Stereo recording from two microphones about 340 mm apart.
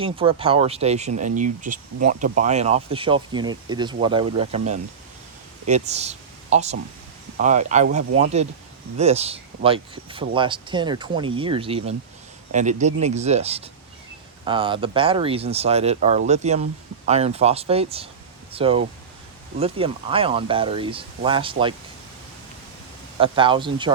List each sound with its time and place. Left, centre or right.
0.0 s speech: centre
23.1 s speech: centre